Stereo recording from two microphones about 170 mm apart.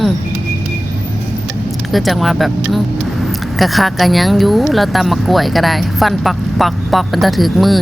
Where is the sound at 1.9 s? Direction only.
Centre (ahead or behind).